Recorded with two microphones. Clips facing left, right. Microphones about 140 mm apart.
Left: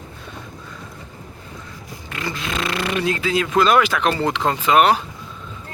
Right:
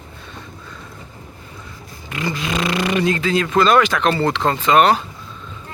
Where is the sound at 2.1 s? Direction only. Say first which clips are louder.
Right 4 dB; centre (ahead or behind).